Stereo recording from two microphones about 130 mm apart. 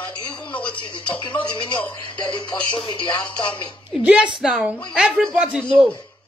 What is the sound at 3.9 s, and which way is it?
Speech, 10° right (ahead or behind).